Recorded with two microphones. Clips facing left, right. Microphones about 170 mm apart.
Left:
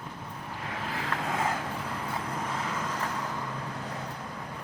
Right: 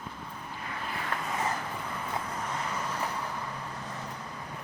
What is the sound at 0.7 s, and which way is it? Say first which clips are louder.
Vehicle: left 2 dB; 90° left.